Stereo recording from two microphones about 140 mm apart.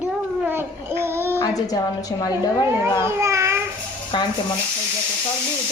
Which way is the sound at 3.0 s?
20° right (ahead or behind).